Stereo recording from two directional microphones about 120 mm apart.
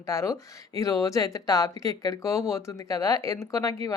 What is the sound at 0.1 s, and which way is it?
Speech, 25° left (ahead or behind).